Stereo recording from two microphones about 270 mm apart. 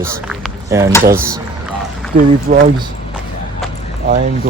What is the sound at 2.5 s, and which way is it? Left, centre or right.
Speech, right.